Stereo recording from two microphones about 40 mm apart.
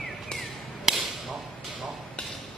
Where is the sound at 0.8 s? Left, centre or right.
Centre.